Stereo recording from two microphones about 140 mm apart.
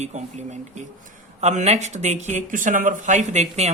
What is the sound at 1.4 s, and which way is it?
Speech, 55° right (ahead or behind).